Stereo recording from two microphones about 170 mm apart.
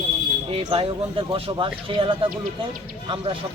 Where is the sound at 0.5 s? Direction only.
35° right (ahead or behind).